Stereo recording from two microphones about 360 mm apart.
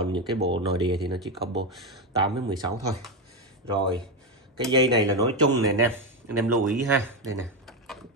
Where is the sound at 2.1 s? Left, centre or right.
Centre.